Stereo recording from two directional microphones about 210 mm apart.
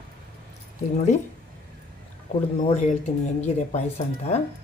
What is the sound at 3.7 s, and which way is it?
Speech, 30° left (ahead or behind).